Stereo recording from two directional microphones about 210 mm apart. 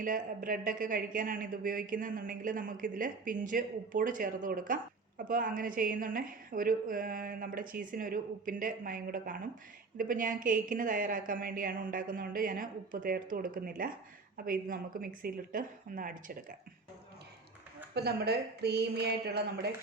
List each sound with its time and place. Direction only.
0.0 s speech: 40° right (ahead or behind)
17.9 s speech: 50° right (ahead or behind)